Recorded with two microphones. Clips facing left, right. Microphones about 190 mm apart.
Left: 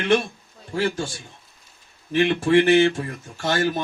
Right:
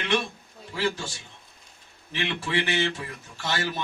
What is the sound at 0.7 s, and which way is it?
Speech, 50° left (ahead or behind).